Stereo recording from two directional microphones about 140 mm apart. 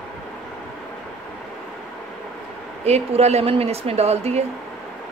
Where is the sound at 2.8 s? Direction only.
50° right (ahead or behind).